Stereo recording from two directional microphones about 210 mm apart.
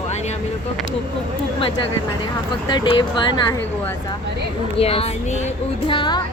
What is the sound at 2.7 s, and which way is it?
Speech, 20° left (ahead or behind).